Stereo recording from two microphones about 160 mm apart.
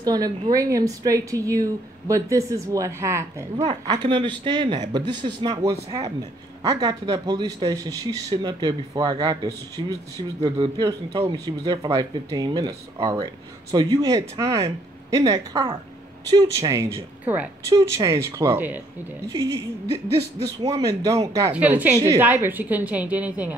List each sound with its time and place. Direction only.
0.0 s speech: 25° right (ahead or behind)
3.6 s speech: 30° right (ahead or behind)
16.3 s a woman's voice: 20° right (ahead or behind)
20.7 s a woman's voice: 20° right (ahead or behind)